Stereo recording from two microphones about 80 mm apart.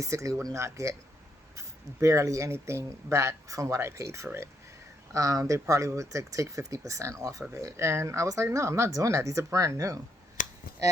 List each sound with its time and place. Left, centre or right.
0.0 s speech: right